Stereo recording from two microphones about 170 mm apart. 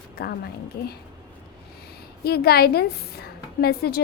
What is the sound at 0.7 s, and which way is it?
Speech, 65° left (ahead or behind).